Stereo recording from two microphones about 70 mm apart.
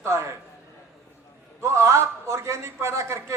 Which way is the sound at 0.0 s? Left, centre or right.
Right.